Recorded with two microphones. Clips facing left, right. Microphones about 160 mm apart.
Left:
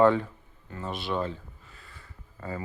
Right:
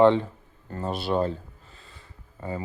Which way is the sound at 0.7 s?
35° right (ahead or behind).